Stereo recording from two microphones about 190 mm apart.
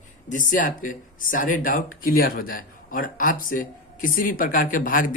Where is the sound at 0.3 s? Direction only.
45° left (ahead or behind).